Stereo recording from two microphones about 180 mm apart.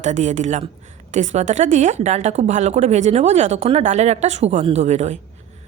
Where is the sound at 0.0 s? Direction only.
40° right (ahead or behind).